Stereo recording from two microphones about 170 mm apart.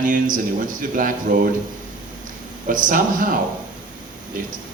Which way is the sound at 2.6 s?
50° right (ahead or behind).